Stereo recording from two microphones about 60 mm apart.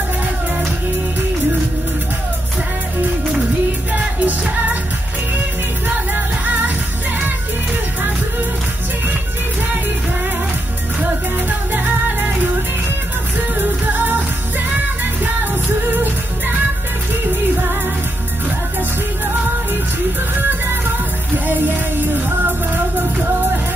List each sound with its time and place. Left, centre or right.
3.9 s music: right
5.9 s music: right
11.0 s music: right
13.6 s music: right
15.9 s music: right
21.5 s music: right